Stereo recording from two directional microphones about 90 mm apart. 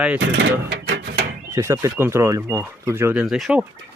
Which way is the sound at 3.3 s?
5° right (ahead or behind).